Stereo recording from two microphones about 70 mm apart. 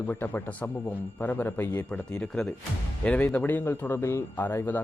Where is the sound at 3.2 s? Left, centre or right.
Left.